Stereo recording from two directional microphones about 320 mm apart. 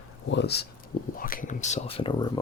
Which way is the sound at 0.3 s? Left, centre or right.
Left.